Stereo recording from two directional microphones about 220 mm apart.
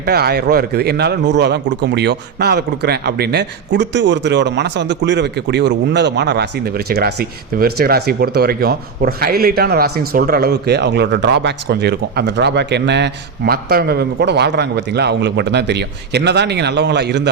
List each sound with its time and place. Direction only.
0.0 s a man's voice: 45° right (ahead or behind)